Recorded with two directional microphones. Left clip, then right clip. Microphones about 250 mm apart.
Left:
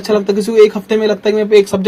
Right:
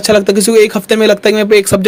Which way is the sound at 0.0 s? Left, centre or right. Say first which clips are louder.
Right 5 dB; right.